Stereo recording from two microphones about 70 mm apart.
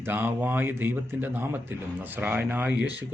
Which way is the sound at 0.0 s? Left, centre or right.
Right.